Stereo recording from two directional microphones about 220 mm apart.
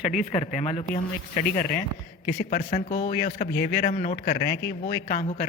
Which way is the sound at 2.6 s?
35° left (ahead or behind).